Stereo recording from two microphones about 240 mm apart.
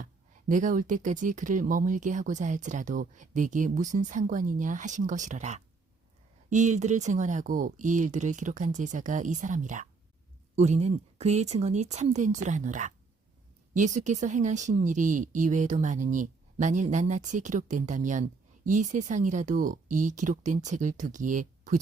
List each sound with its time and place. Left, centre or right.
0.0 s speech: right